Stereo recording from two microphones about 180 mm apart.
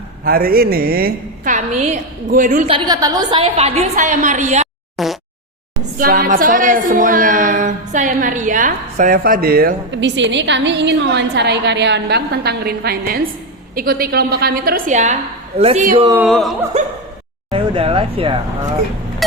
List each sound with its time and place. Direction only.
0.3 s a woman's voice: 55° right (ahead or behind)
1.5 s a woman's voice: 40° right (ahead or behind)
2.6 s a woman's voice: 25° right (ahead or behind)
3.9 s a woman's voice: 45° right (ahead or behind)
5.0 s a sound: centre (ahead or behind)
6.0 s a woman's voice: 50° right (ahead or behind); by 15.8 s 35° right (ahead or behind)
16.1 s speech: 5° right (ahead or behind)
17.5 s speech: 30° right (ahead or behind)